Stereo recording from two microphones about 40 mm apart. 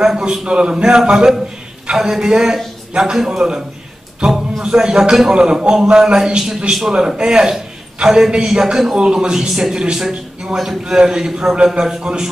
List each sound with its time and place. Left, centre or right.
0.2 s a man's voice: centre
0.5 s a man's voice: right